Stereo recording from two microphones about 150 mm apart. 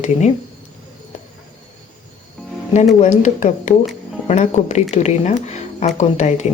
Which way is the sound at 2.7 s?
50° left (ahead or behind).